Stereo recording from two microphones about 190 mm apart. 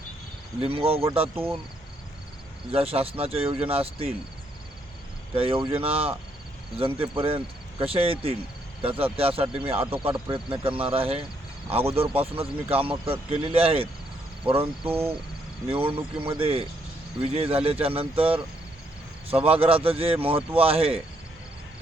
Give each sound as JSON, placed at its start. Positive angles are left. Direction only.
{"t": 0.6, "sound": "speech", "side_deg": -30}
{"t": 2.7, "sound": "speech", "side_deg": -30}
{"t": 5.3, "sound": "speech", "side_deg": -30}